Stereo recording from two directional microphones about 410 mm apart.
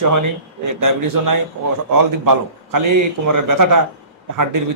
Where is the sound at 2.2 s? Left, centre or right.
Right.